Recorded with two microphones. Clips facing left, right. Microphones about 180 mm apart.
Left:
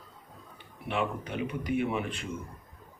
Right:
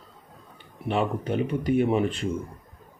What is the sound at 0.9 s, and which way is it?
Speech, 35° right (ahead or behind).